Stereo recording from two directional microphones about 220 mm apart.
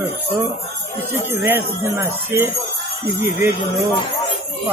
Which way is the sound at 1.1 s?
10° right (ahead or behind).